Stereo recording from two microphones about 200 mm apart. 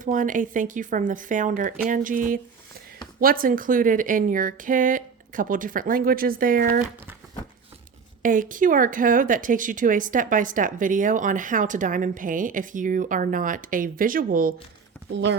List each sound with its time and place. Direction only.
0.0 s speech: 40° right (ahead or behind)
8.2 s speech: 40° right (ahead or behind)
15.1 s speech: 60° right (ahead or behind)